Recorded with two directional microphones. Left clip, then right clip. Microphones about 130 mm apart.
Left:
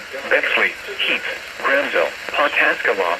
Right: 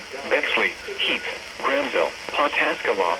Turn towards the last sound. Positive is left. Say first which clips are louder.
# left 4 dB
turn(degrees=-20)  # may be behind; listen again after turning